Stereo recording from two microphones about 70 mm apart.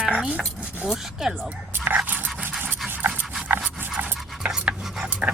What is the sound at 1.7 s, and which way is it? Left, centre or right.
Dog, right.